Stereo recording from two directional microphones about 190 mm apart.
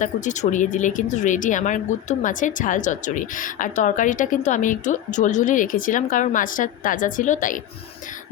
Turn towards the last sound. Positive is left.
turn(degrees=45)  # may be behind; listen again after turning